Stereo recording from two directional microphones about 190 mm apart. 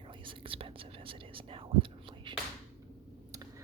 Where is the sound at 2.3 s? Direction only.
25° right (ahead or behind).